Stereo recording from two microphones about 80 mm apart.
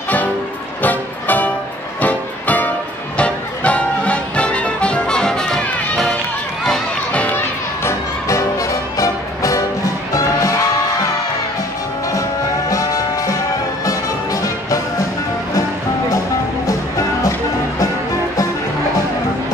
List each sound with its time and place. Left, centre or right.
0.8 s music: left; by 7.2 s centre
7.2 s music: left
12.1 s music: left